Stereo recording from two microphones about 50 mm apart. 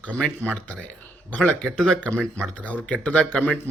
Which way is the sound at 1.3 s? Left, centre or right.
Left.